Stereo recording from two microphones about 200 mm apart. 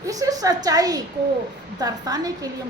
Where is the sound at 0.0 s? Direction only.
15° right (ahead or behind).